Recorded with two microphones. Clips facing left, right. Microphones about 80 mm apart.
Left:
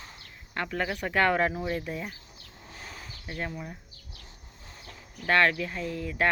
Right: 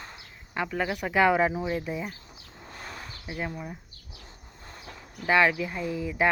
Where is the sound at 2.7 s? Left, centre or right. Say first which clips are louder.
Right 3 dB; right.